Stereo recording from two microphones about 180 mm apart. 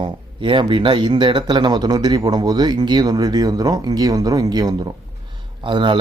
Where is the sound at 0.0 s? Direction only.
25° right (ahead or behind).